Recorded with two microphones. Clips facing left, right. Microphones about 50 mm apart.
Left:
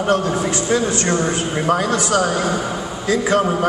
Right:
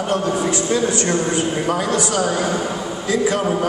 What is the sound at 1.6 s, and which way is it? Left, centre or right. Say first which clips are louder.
Speech: left 2 dB; left.